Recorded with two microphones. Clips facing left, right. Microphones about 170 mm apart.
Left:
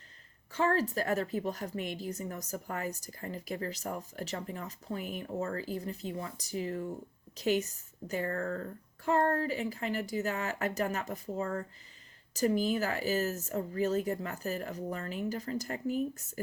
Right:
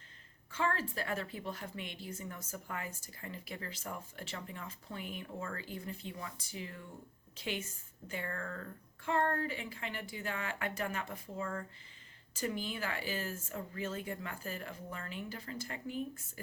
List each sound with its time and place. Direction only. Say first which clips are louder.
0.5 s a woman's voice: left 6 dB; 40° left (ahead or behind)